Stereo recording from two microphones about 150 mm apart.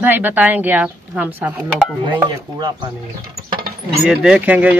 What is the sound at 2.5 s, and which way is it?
Speech, 25° right (ahead or behind).